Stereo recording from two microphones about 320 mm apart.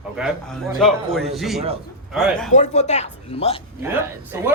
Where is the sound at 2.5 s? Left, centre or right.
Left.